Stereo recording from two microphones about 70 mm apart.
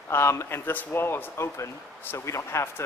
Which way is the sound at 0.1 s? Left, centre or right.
Left.